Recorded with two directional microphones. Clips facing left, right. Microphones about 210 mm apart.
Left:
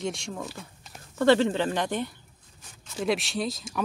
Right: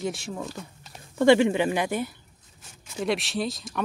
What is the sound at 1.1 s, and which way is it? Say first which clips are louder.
Speech: right 3 dB; 15° right (ahead or behind).